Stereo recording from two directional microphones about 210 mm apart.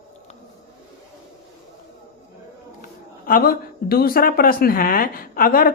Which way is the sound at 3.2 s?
45° left (ahead or behind).